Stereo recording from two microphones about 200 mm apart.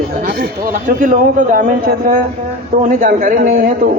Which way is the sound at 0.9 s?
45° right (ahead or behind).